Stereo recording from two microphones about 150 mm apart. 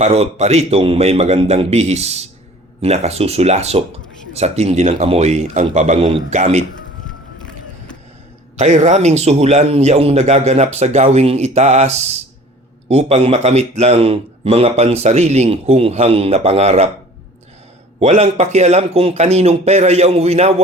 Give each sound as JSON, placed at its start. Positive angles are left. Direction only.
{"t": 0.0, "sound": "speech", "side_deg": -45}
{"t": 8.5, "sound": "speech", "side_deg": -50}
{"t": 18.0, "sound": "speech", "side_deg": -50}